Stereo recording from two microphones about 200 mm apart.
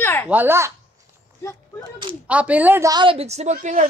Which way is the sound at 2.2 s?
5° right (ahead or behind).